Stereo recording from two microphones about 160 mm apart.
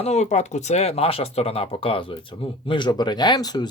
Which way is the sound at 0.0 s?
45° left (ahead or behind).